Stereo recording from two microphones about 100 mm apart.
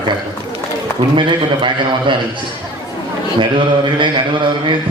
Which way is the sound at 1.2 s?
55° right (ahead or behind).